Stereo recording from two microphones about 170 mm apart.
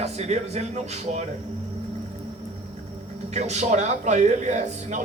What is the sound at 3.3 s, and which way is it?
A man's voice, 40° right (ahead or behind).